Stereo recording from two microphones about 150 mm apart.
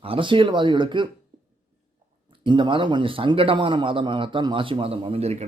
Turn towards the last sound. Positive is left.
turn(degrees=-45)  # may be behind; listen again after turning